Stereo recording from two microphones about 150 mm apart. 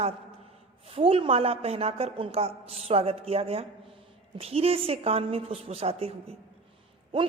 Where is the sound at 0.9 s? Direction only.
40° right (ahead or behind).